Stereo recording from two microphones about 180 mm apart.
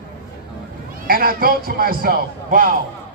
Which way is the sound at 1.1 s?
55° right (ahead or behind).